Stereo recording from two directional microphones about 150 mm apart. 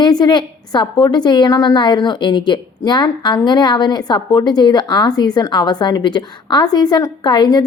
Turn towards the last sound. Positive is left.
turn(degrees=30)  # may be behind; listen again after turning